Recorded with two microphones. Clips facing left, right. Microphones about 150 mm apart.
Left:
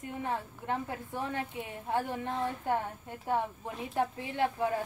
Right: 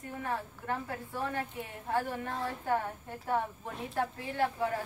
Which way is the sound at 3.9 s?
15° left (ahead or behind).